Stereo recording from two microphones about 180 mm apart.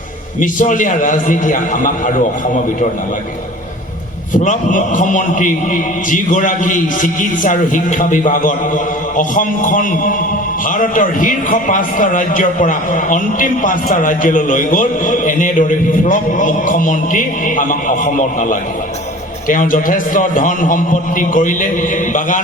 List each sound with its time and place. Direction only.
0.3 s a man's voice: 45° left (ahead or behind)
4.4 s a man's voice: 45° left (ahead or behind)